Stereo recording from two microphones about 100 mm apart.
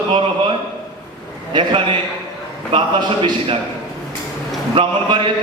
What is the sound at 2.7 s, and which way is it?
Speech, 50° right (ahead or behind).